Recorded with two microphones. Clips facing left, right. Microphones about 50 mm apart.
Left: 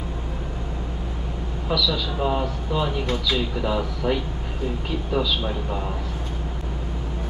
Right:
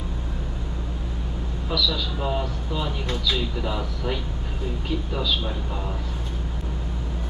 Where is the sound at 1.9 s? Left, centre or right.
Centre.